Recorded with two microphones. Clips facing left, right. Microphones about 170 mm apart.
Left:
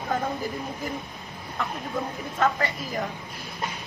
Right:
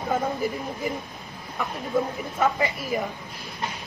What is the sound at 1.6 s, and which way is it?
Speech, 15° right (ahead or behind).